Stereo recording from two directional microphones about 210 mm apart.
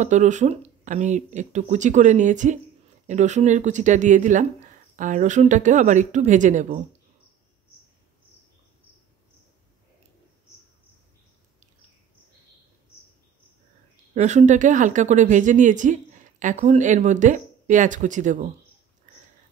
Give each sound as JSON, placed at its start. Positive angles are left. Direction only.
{"t": 0.0, "sound": "a woman's voice", "side_deg": -35}
{"t": 14.1, "sound": "a woman's voice", "side_deg": -35}